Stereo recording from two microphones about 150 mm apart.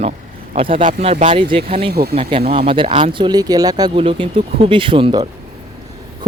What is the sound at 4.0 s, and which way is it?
Speech, 35° right (ahead or behind).